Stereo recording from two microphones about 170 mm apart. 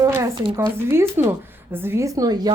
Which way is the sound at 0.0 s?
20° right (ahead or behind).